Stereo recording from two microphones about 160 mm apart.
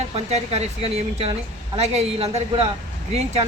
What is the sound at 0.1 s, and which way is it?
Speech, 40° right (ahead or behind).